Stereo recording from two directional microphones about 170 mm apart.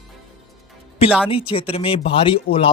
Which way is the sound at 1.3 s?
30° left (ahead or behind).